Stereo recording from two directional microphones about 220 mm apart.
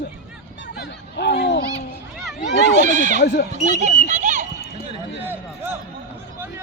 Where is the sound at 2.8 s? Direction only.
35° right (ahead or behind).